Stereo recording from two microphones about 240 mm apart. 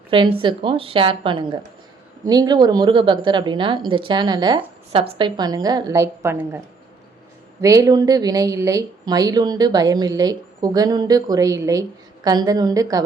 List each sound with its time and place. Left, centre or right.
0.1 s a woman's voice: right
7.6 s speech: centre